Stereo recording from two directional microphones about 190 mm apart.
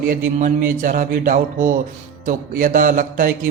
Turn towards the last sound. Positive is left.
turn(degrees=-45)  # may be behind; listen again after turning